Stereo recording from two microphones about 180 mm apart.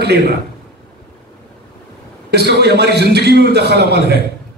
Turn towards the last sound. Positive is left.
turn(degrees=-65)  # may be behind; listen again after turning